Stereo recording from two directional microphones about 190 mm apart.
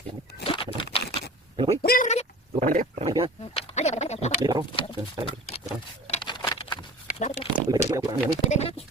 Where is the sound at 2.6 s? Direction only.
45° right (ahead or behind).